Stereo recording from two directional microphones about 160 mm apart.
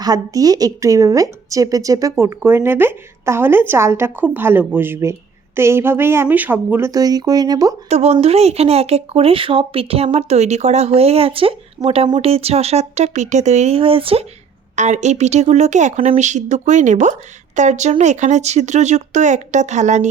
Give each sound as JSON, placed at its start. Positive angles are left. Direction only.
{"t": 0.0, "sound": "a woman's voice", "side_deg": -25}
{"t": 7.9, "sound": "speech", "side_deg": -40}
{"t": 14.8, "sound": "speech", "side_deg": -45}